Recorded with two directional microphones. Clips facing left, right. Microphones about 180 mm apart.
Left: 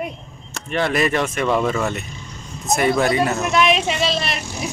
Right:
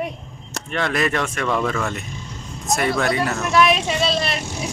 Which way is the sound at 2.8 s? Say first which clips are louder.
Left 4 dB; 20° left (ahead or behind).